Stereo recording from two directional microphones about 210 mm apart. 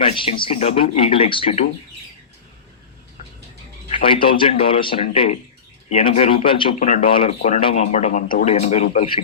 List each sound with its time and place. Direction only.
0.0 s speech: 25° left (ahead or behind)
3.8 s speech: 25° left (ahead or behind)